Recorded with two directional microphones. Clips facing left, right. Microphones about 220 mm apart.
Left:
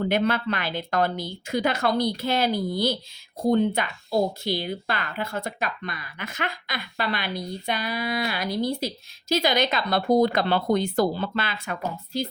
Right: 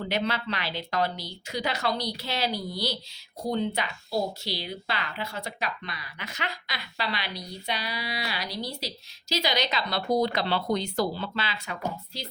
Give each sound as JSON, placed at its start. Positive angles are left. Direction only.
{"t": 0.1, "sound": "a woman's voice", "side_deg": 50}